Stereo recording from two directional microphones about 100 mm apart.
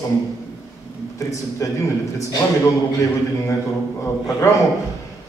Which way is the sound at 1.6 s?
30° left (ahead or behind).